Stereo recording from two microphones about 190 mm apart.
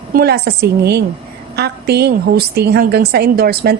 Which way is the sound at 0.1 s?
55° right (ahead or behind).